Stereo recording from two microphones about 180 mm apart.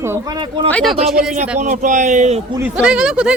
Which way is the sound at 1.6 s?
45° right (ahead or behind).